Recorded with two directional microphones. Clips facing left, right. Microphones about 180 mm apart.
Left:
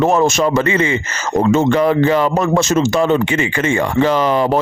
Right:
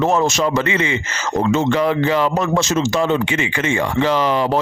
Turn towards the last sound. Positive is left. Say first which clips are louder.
# left 3 dB
turn(degrees=50)  # may be behind; listen again after turning